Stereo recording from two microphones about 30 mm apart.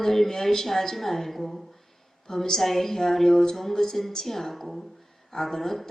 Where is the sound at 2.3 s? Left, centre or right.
Centre.